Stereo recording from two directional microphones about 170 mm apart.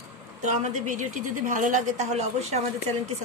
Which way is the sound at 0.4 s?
45° right (ahead or behind).